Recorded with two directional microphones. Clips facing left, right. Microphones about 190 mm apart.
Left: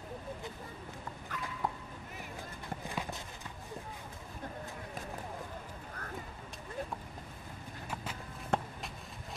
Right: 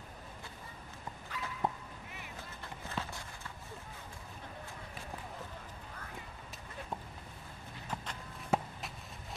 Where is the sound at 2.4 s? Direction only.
15° left (ahead or behind).